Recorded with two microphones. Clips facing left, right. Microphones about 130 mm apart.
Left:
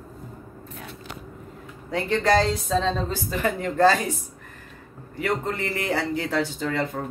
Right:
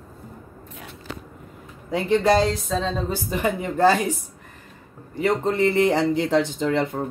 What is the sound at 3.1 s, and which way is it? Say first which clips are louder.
Speech: right 2 dB; 15° right (ahead or behind).